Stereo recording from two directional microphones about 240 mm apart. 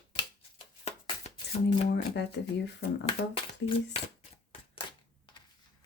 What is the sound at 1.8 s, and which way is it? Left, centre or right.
Speech, left.